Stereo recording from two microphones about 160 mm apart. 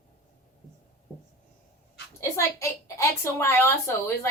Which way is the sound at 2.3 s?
20° left (ahead or behind).